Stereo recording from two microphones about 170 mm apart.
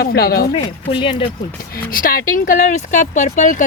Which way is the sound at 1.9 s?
60° left (ahead or behind).